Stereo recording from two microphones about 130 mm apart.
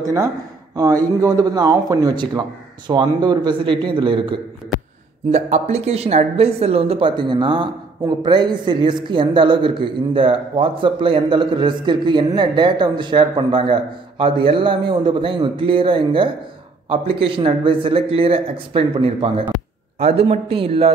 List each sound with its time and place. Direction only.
0.7 s a man's voice: 30° right (ahead or behind)
5.3 s a man's voice: 55° right (ahead or behind)